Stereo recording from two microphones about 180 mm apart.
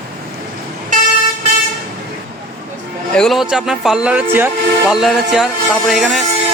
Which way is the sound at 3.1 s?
Centre (ahead or behind).